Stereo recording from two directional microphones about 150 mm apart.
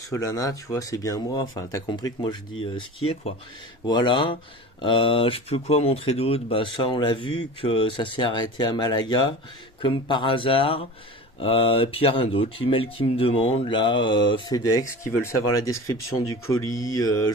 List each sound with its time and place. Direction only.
0.1 s speech: 20° left (ahead or behind); by 3.3 s 40° left (ahead or behind)
3.8 s speech: 30° left (ahead or behind)